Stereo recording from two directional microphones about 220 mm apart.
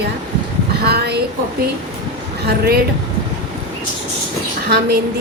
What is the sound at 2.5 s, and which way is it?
Speech, 45° right (ahead or behind).